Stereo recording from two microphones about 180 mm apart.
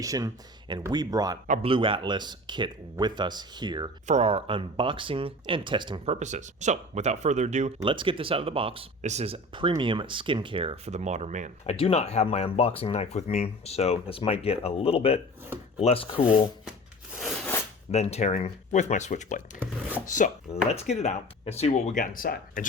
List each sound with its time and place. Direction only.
0.0 s speech: 20° right (ahead or behind)
4.0 s speech: 35° right (ahead or behind)
6.1 s speech: 40° right (ahead or behind)
11.6 s speech: 35° left (ahead or behind)
17.2 s a sound: centre (ahead or behind)
17.9 s speech: 35° left (ahead or behind)